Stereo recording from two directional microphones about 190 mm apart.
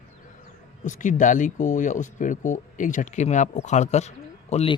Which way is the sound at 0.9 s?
40° left (ahead or behind).